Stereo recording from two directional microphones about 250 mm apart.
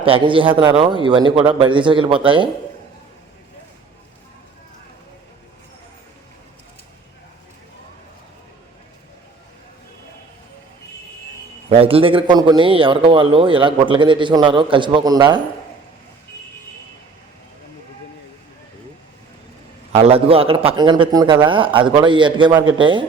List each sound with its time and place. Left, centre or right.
0.0 s a man's voice: right
11.7 s a man's voice: right
19.9 s a man's voice: right